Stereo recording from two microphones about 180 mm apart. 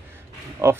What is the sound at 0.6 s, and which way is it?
Speech, 15° right (ahead or behind).